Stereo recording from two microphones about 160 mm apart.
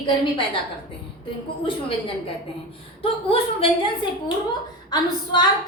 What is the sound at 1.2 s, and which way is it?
A woman's voice, 35° left (ahead or behind).